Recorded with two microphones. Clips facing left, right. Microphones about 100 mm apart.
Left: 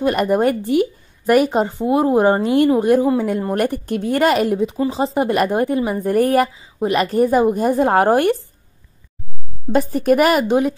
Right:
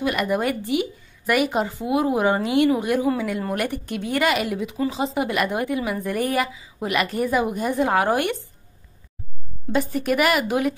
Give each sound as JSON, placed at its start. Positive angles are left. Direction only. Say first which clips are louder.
{"t": 0.0, "sound": "a woman's voice", "louder": "left 6 dB", "side_deg": 40}
{"t": 6.6, "sound": "a woman's voice", "louder": "left 6 dB", "side_deg": 30}
{"t": 9.7, "sound": "a woman's voice", "louder": "left 6 dB", "side_deg": 40}